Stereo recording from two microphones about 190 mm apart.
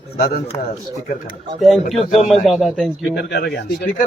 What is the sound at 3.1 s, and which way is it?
Speech, 55° left (ahead or behind).